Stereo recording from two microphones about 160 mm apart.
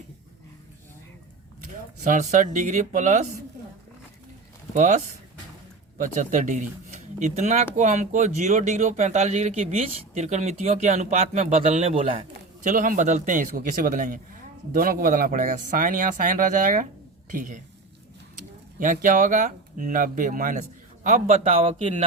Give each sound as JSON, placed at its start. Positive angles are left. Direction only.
{"t": 2.0, "sound": "speech", "side_deg": -50}
{"t": 4.7, "sound": "speech", "side_deg": -50}
{"t": 12.6, "sound": "speech", "side_deg": -55}
{"t": 18.8, "sound": "speech", "side_deg": -55}